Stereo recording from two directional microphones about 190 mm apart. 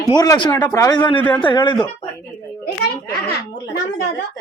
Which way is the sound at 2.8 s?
55° left (ahead or behind).